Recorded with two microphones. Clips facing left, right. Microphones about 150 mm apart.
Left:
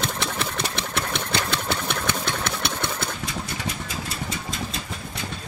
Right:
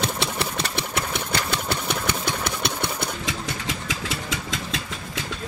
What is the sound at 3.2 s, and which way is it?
Engine, 90° right.